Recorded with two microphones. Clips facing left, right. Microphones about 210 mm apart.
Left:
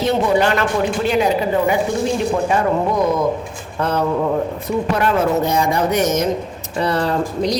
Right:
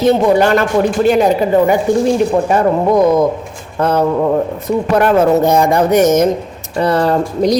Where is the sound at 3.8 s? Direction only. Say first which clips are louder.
Right 5 dB; 45° right (ahead or behind).